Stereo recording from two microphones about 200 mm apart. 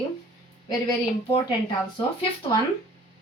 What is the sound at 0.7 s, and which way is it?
Speech, 20° left (ahead or behind).